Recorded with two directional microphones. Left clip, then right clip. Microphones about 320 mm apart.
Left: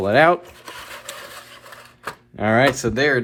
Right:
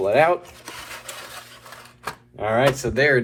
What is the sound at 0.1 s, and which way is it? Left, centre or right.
Speech, left.